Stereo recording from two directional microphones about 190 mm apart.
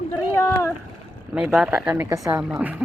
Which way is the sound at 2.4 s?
5° right (ahead or behind).